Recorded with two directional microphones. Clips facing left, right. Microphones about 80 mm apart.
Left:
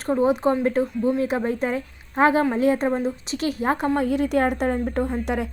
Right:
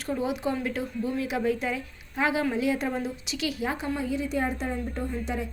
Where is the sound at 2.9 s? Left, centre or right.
Left.